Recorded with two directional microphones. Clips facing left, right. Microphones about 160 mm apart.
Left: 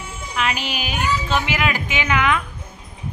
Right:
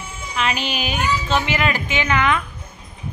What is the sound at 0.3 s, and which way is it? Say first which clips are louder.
A woman's voice: right 1 dB; 5° left (ahead or behind).